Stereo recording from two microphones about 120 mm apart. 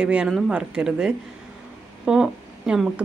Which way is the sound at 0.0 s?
5° right (ahead or behind).